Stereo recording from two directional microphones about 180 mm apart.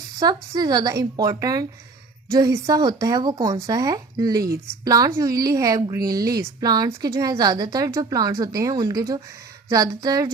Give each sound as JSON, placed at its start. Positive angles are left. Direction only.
{"t": 0.2, "sound": "a woman's voice", "side_deg": -20}